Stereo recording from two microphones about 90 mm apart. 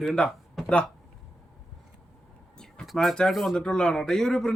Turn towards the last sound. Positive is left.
turn(degrees=5)  # may be behind; listen again after turning